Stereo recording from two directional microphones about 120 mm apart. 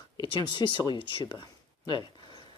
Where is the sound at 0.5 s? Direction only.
40° left (ahead or behind).